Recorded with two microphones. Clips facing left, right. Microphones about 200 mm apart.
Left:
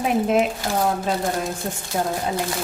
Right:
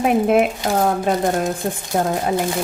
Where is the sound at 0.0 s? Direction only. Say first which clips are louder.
Right 4 dB; 60° right (ahead or behind).